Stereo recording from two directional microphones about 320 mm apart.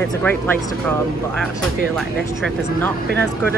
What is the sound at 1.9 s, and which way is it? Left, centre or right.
Speech, centre.